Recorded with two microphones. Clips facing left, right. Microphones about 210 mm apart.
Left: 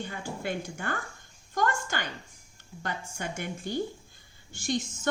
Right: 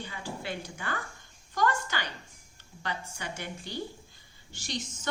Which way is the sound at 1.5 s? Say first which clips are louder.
Even; 50° left (ahead or behind).